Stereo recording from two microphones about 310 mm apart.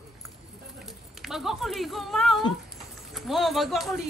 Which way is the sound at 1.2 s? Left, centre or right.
Centre.